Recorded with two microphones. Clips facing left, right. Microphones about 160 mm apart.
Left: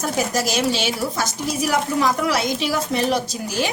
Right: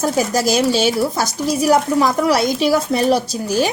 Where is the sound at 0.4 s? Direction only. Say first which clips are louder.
Right 6 dB; 40° right (ahead or behind).